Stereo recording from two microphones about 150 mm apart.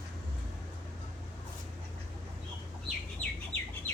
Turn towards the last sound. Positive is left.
turn(degrees=10)  # may be behind; listen again after turning